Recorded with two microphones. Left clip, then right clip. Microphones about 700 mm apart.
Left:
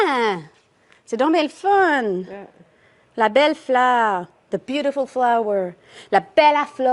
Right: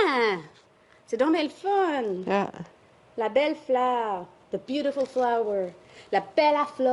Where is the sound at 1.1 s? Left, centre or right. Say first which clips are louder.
Left 6 dB; left.